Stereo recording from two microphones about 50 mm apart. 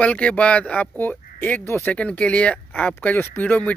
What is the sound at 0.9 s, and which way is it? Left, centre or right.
Speech, left.